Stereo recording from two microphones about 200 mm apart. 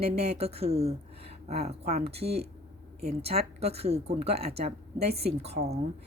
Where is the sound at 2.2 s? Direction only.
55° right (ahead or behind).